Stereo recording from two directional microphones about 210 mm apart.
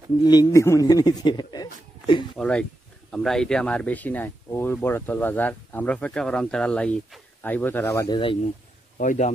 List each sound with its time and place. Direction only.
0.2 s a man's voice: 20° left (ahead or behind)
2.3 s speech: 5° left (ahead or behind); by 8.4 s 20° left (ahead or behind)
8.9 s a man's voice: 35° left (ahead or behind)